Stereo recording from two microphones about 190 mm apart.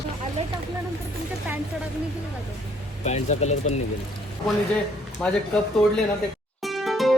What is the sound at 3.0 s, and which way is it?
Speech, 35° left (ahead or behind).